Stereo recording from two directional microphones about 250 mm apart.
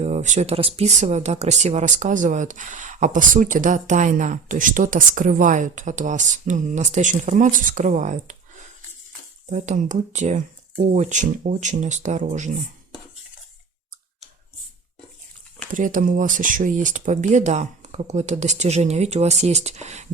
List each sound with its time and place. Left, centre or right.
0.0 s speech: right
15.7 s speech: right